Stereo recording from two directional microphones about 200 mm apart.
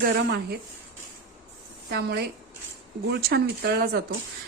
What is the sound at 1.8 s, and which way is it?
Speech, 55° right (ahead or behind).